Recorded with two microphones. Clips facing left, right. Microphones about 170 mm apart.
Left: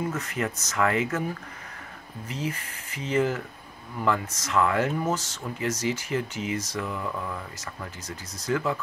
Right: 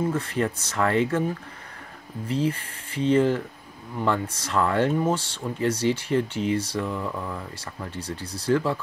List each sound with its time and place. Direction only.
0.1 s speech: 30° right (ahead or behind)